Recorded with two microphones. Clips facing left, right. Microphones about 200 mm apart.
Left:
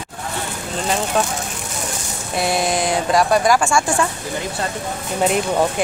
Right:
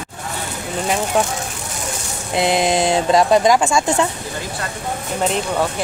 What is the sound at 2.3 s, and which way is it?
Speech, 20° right (ahead or behind).